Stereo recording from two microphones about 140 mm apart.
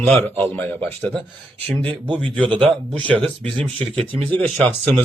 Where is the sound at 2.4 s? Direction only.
35° right (ahead or behind).